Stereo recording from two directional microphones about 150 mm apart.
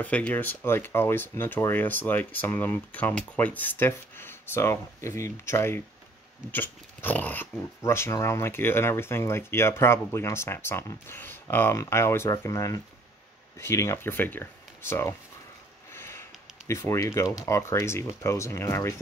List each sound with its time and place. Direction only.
0.0 s speech: 10° left (ahead or behind)
15.9 s sniff: 15° left (ahead or behind)
16.6 s speech: 20° left (ahead or behind)